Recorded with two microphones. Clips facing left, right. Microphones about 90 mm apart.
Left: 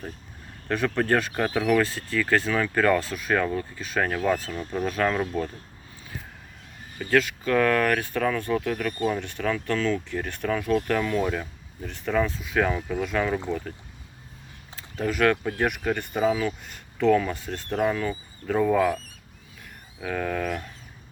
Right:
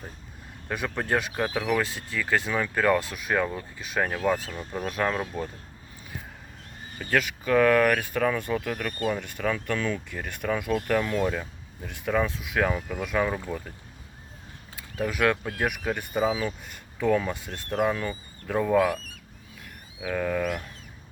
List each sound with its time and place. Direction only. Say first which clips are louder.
0.7 s speech: left 4 dB; 15° right (ahead or behind)
7.0 s speech: left 4 dB; 10° right (ahead or behind)
14.8 s speech: left 2 dB; 10° right (ahead or behind)
20.0 s speech: right 1 dB; centre (ahead or behind)